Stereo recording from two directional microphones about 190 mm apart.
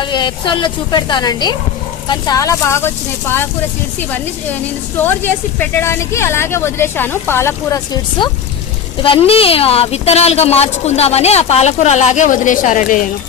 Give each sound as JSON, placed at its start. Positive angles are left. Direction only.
{"t": 0.0, "sound": "a woman's voice", "side_deg": 25}
{"t": 4.9, "sound": "speech", "side_deg": 10}
{"t": 9.0, "sound": "a woman's voice", "side_deg": 30}